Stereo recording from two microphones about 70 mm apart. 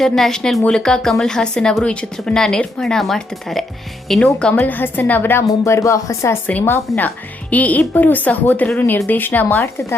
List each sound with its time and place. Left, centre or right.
0.0 s a woman's voice: centre
4.2 s a woman's voice: centre
4.7 s a woman's voice: left
5.5 s speech: left
6.5 s a woman's voice: left
8.8 s speech: left
9.0 s a woman's voice: left